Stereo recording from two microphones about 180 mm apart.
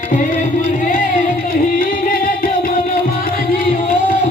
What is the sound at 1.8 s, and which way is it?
Music, 50° left (ahead or behind).